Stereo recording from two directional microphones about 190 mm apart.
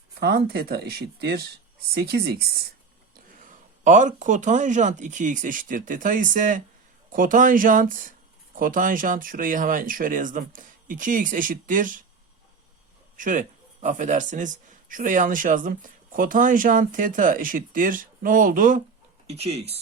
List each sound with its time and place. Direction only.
0.1 s speech: 55° right (ahead or behind)
3.8 s speech: 40° right (ahead or behind)
13.1 s speech: 45° right (ahead or behind)
19.3 s speech: 35° right (ahead or behind)